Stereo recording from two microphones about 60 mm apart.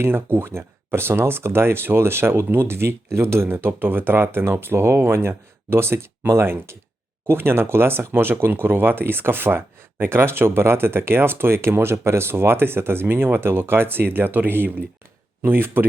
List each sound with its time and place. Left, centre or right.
0.0 s speech: right